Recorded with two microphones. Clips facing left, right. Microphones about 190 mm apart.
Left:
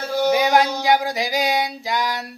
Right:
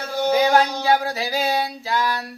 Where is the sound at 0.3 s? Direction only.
15° left (ahead or behind).